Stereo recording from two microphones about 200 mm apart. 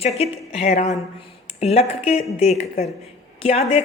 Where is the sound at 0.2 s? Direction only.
35° left (ahead or behind).